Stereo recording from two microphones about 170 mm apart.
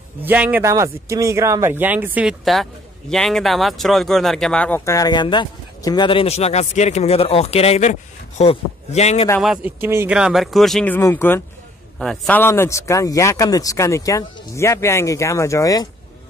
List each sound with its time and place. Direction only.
0.2 s speech: 10° right (ahead or behind); by 9.3 s 40° left (ahead or behind)
9.4 s speech: centre (ahead or behind)
9.8 s speech: 15° right (ahead or behind); by 11.0 s 5° left (ahead or behind)
11.0 s a man's voice: 15° left (ahead or behind)